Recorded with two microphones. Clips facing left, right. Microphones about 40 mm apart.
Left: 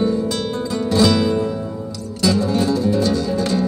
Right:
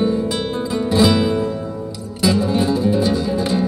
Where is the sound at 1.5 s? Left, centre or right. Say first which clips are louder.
Even; right.